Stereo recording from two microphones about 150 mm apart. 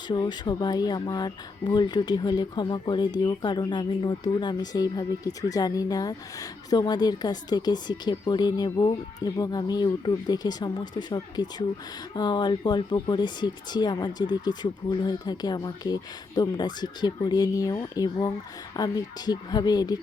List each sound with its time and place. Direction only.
0.1 s speech: 30° left (ahead or behind)